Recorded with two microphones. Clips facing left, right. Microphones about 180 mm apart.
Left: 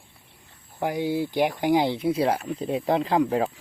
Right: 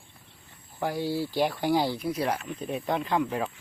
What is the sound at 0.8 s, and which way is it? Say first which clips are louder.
Speech: left 3 dB; 20° left (ahead or behind).